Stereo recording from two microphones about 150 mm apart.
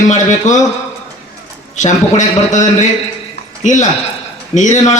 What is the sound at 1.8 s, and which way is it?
Speech, 55° left (ahead or behind).